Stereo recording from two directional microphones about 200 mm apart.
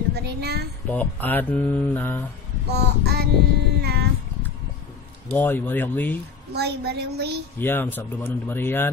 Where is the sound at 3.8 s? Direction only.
55° right (ahead or behind).